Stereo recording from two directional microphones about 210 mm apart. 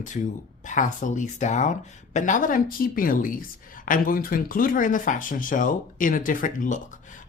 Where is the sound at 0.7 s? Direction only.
35° left (ahead or behind).